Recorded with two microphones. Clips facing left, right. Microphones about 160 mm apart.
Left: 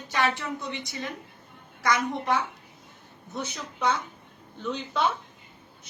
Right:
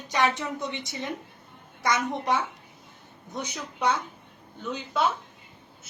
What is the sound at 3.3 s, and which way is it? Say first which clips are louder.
Speech: even; 10° right (ahead or behind).